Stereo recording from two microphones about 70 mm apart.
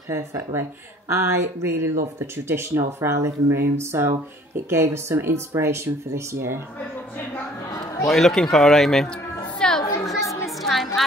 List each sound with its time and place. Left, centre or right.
0.1 s speech: right
8.1 s speech: centre
9.6 s chatter: centre
10.4 s a sound: centre